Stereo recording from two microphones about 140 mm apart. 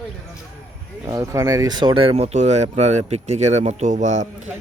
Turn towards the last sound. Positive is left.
turn(degrees=-55)  # may be behind; listen again after turning